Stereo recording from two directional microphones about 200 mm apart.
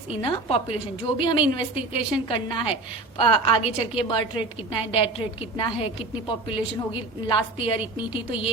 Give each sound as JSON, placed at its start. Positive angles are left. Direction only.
{"t": 0.2, "sound": "a woman's voice", "side_deg": 25}